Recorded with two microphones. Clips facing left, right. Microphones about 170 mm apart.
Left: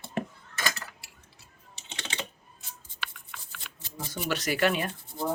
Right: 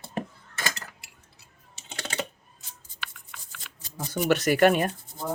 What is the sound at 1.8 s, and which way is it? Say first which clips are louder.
Typing: right 5 dB; 40° right (ahead or behind).